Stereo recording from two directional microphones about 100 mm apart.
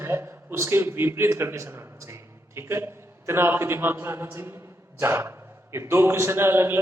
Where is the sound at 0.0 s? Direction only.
25° right (ahead or behind).